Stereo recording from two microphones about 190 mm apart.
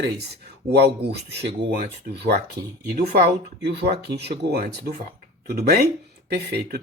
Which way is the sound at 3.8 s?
60° right (ahead or behind).